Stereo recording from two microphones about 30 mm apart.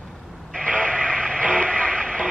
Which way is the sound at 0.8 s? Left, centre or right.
Left.